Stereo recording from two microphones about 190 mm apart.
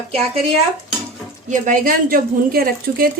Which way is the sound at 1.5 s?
45° right (ahead or behind).